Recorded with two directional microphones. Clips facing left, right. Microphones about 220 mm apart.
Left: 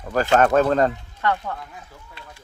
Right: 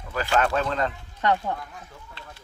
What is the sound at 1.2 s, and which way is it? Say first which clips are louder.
Speech: even; 20° right (ahead or behind).